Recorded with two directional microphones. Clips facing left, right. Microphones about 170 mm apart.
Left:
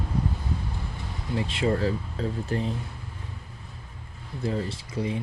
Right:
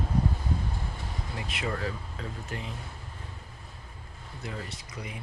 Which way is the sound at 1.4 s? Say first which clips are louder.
Left 9 dB; 30° left (ahead or behind).